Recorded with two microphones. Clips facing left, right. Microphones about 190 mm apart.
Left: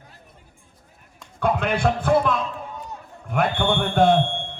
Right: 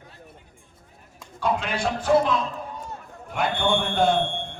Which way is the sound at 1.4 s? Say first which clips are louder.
Left 4 dB; 55° left (ahead or behind).